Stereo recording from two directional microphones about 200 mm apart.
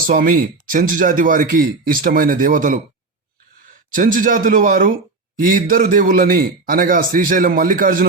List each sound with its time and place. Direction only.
0.1 s speech: 45° right (ahead or behind)